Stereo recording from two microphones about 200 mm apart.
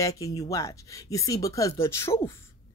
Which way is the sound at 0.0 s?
15° left (ahead or behind).